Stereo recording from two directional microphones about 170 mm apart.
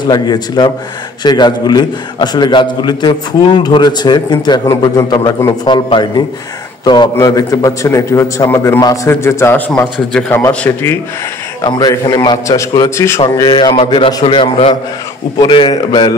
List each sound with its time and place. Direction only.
0.1 s a man's voice: 25° left (ahead or behind)
11.6 s a man's voice: 25° left (ahead or behind)
13.2 s a man's voice: 25° left (ahead or behind)